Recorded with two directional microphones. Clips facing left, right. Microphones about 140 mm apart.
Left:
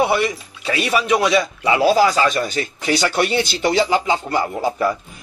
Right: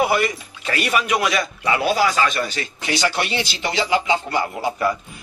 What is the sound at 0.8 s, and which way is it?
Speech, 30° left (ahead or behind).